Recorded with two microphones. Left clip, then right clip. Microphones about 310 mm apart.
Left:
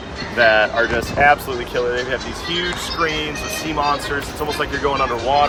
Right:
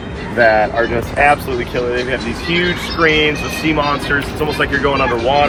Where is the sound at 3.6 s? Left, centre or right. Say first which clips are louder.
Right 4 dB; centre.